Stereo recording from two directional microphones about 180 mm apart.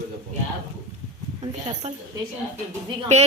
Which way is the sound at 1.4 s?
35° right (ahead or behind).